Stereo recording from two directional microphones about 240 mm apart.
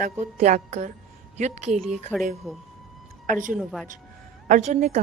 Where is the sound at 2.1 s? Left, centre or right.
Centre.